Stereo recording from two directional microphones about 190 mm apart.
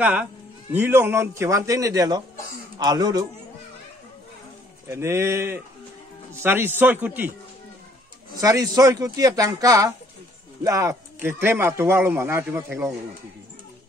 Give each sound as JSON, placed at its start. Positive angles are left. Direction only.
{"t": 0.0, "sound": "speech", "side_deg": -5}
{"t": 4.8, "sound": "speech", "side_deg": -15}
{"t": 8.4, "sound": "speech", "side_deg": -20}